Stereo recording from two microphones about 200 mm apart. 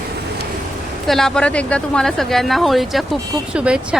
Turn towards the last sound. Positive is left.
turn(degrees=-5)  # may be behind; listen again after turning